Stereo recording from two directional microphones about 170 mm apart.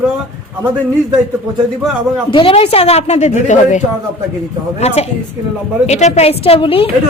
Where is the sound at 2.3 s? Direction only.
30° left (ahead or behind).